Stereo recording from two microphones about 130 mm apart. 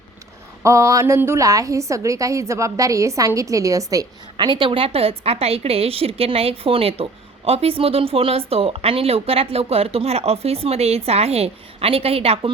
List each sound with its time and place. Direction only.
0.6 s a woman's voice: 25° right (ahead or behind); by 12.5 s 50° right (ahead or behind)